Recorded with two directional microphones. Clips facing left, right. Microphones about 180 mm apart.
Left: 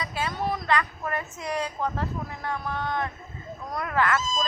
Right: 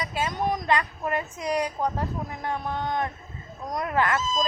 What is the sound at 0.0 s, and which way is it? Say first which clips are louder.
Speech: right 2 dB; 20° right (ahead or behind).